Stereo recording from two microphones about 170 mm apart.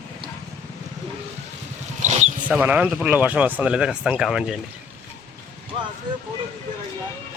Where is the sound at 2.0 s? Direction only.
40° right (ahead or behind).